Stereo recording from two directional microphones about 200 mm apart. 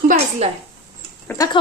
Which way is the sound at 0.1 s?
30° right (ahead or behind).